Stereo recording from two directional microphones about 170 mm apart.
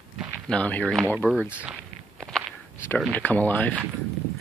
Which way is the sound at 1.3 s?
5° right (ahead or behind).